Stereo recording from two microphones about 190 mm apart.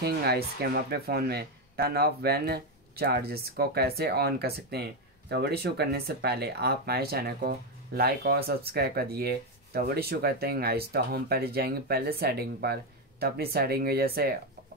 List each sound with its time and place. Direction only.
0.0 s speech: 55° right (ahead or behind)